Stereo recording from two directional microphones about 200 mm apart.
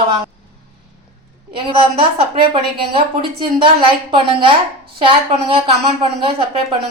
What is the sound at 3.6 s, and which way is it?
A woman's voice, 25° right (ahead or behind).